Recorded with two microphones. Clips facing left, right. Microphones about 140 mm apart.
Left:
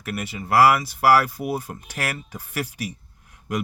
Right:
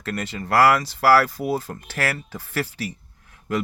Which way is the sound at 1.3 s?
90° right.